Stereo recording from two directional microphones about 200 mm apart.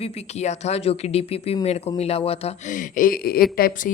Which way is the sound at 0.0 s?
30° left (ahead or behind).